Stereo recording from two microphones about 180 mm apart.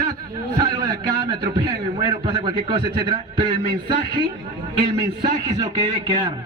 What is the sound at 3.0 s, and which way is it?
Speech, 25° right (ahead or behind).